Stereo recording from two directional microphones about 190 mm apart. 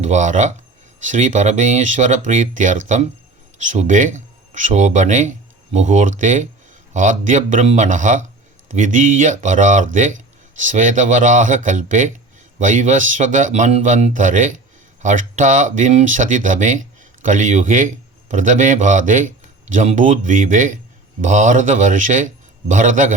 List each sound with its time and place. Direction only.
0.0 s a man's voice: 40° right (ahead or behind)